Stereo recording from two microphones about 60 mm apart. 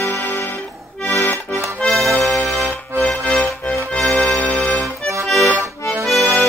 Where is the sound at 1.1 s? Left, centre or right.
Left.